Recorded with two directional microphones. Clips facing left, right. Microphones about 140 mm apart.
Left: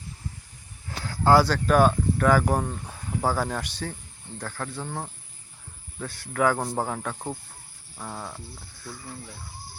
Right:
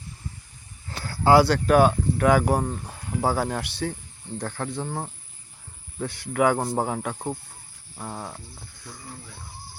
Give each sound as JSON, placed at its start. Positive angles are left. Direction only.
{"t": 1.0, "sound": "speech", "side_deg": -10}